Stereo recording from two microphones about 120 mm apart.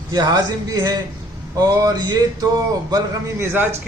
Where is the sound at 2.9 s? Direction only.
20° right (ahead or behind).